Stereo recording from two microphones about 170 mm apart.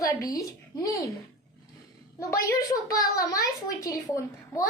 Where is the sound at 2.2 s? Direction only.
15° left (ahead or behind).